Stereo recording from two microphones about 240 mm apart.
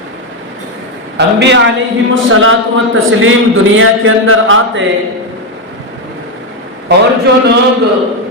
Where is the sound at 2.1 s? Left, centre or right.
Right.